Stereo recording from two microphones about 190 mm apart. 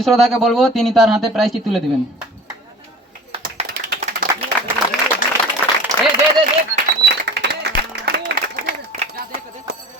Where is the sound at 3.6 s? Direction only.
55° right (ahead or behind).